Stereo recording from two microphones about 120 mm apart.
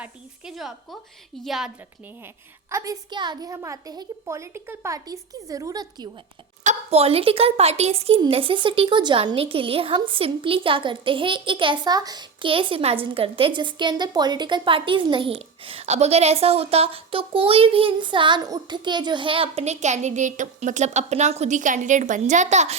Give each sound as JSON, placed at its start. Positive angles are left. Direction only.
{"t": 0.0, "sound": "a woman's voice", "side_deg": -5}
{"t": 2.6, "sound": "a woman's voice", "side_deg": -30}
{"t": 6.7, "sound": "a woman's voice", "side_deg": -55}